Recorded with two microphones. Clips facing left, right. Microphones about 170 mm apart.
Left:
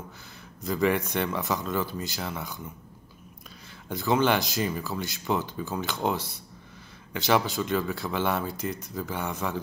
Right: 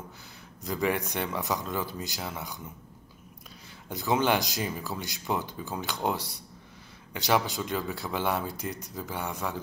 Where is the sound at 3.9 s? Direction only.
15° right (ahead or behind).